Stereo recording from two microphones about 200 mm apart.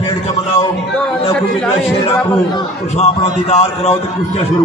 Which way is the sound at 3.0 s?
30° left (ahead or behind).